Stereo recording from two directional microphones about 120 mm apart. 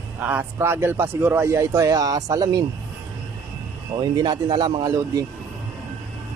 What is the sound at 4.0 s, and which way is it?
Speech, 40° right (ahead or behind).